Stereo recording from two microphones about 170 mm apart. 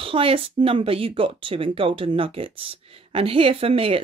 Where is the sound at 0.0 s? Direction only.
30° right (ahead or behind).